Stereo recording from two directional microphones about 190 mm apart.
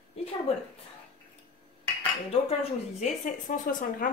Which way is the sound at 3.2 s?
45° left (ahead or behind).